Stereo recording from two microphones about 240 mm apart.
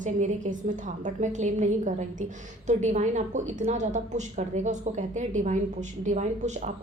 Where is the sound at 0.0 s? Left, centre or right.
Right.